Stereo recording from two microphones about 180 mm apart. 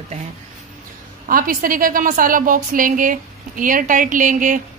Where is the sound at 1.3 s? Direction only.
50° right (ahead or behind).